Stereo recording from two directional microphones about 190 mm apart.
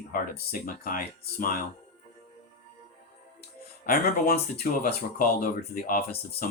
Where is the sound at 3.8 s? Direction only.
50° left (ahead or behind).